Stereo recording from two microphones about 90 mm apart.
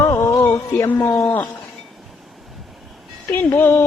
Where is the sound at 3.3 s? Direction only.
20° left (ahead or behind).